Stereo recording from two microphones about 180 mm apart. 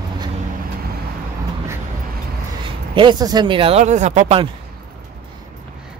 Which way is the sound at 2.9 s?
25° right (ahead or behind).